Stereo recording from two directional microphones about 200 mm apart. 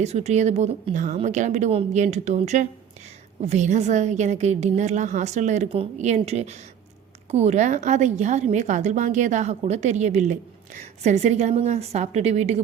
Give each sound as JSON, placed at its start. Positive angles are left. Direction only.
{"t": 0.0, "sound": "a woman's voice", "side_deg": -35}